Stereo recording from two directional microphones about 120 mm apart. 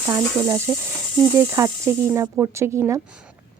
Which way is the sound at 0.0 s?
25° right (ahead or behind).